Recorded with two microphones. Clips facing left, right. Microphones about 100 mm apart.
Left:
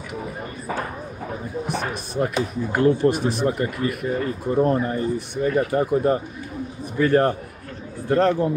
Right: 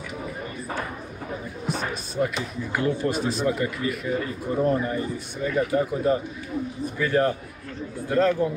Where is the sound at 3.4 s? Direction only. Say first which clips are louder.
Left 2 dB; 45° left (ahead or behind).